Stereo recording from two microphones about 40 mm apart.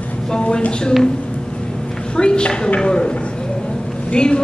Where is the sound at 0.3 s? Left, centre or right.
Left.